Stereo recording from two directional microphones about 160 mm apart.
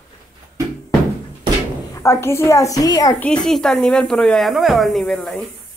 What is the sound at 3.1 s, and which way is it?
Speech, 5° left (ahead or behind).